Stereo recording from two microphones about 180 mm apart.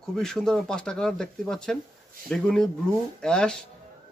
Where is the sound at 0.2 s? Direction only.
5° left (ahead or behind).